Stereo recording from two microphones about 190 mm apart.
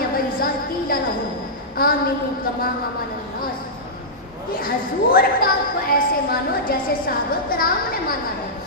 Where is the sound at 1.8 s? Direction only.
50° left (ahead or behind).